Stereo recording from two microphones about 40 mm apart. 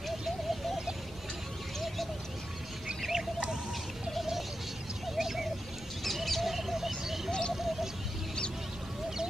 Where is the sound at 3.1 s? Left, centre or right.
Centre.